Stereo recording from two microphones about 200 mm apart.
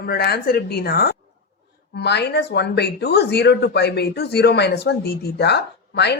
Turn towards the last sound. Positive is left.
turn(degrees=55)  # may be behind; listen again after turning